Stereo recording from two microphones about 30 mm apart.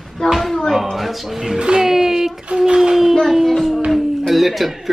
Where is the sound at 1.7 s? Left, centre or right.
Centre.